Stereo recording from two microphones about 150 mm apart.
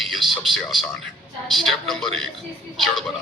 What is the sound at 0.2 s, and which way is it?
A man's voice, centre (ahead or behind).